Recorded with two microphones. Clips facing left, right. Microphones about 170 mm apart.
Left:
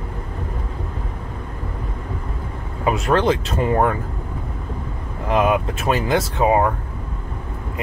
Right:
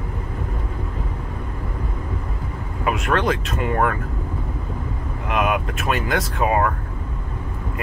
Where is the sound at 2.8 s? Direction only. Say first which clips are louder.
Left 3 dB; 30° left (ahead or behind).